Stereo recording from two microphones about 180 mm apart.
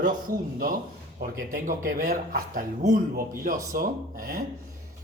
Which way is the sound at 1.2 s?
50° right (ahead or behind).